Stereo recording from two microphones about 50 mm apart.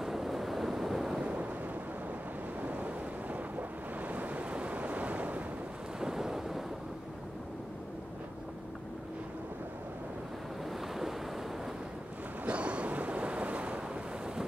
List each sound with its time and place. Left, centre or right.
0.0 s waves: centre
1.2 s a sound: right
2.6 s waves: right
5.9 s wind noise: centre
10.7 s waves: centre
12.4 s waves: right